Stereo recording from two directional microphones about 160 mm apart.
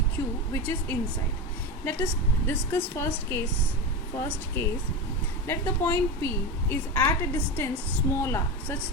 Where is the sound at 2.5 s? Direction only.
15° left (ahead or behind).